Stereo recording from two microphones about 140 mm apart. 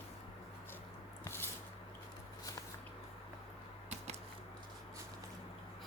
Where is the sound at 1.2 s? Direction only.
15° left (ahead or behind).